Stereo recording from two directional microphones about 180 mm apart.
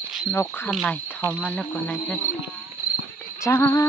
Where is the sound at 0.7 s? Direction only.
Centre (ahead or behind).